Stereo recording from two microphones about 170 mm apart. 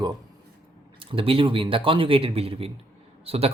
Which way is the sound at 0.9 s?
30° right (ahead or behind).